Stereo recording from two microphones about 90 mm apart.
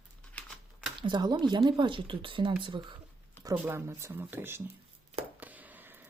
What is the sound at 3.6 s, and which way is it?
Speech, 30° right (ahead or behind).